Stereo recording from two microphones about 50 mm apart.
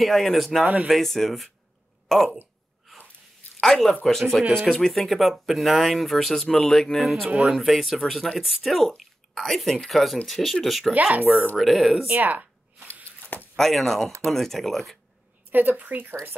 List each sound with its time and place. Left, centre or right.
0.0 s speech: centre
3.6 s speech: centre
7.4 s speech: centre
11.0 s speech: right
11.5 s speech: centre
12.1 s speech: right
13.6 s speech: centre
15.5 s speech: right